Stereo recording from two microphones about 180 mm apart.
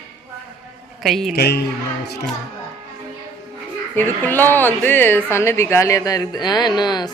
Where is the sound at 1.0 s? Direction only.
Centre (ahead or behind).